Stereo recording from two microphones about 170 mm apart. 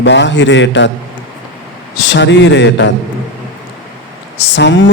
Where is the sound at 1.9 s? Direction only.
90° left.